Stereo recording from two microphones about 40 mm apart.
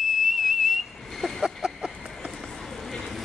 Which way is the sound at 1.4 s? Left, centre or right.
Centre.